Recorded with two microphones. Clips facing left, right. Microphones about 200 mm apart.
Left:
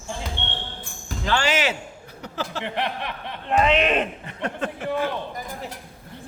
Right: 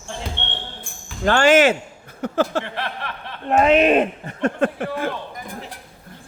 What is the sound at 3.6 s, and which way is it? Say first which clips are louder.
Speech: right 6 dB; 45° right (ahead or behind).